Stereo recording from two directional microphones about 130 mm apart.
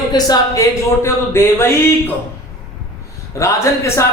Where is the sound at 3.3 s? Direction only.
20° left (ahead or behind).